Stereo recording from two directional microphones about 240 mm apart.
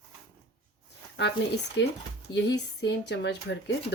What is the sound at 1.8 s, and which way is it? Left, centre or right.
Speech, left.